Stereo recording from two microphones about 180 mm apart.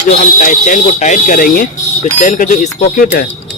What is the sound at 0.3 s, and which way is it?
Speech, 45° left (ahead or behind).